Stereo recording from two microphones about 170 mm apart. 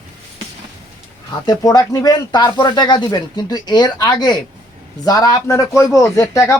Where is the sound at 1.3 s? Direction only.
20° left (ahead or behind).